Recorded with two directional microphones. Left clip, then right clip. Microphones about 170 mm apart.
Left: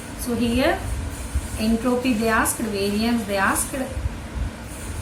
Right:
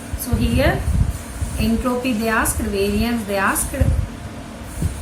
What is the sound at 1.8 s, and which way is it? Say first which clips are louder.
A woman's voice: even; 15° right (ahead or behind).